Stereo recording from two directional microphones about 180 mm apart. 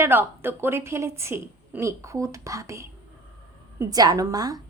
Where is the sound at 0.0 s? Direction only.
10° right (ahead or behind).